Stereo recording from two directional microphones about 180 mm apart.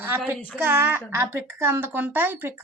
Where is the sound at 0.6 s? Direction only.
10° right (ahead or behind).